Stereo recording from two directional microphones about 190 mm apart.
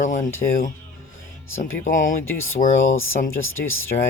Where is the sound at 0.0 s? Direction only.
40° left (ahead or behind).